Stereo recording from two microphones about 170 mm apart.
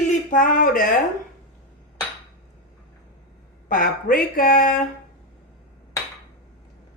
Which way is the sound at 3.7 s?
55° left (ahead or behind).